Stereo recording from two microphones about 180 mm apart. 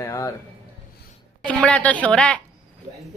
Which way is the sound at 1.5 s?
5° left (ahead or behind).